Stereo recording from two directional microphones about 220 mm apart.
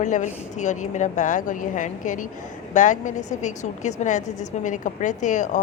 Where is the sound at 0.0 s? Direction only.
35° left (ahead or behind).